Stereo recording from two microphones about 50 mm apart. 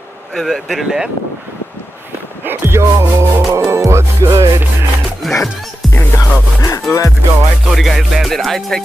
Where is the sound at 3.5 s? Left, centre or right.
Right.